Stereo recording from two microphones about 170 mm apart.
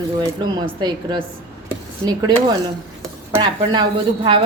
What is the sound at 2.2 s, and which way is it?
Speech, 25° right (ahead or behind).